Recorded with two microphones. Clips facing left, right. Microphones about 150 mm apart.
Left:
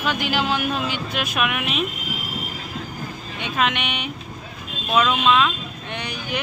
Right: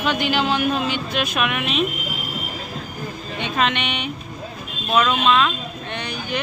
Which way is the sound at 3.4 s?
5° left (ahead or behind).